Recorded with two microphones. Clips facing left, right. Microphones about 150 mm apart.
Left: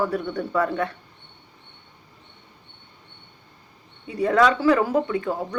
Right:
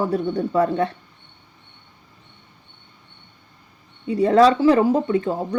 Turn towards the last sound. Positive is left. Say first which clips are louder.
# right 4 dB
turn(degrees=-30)  # may be behind; listen again after turning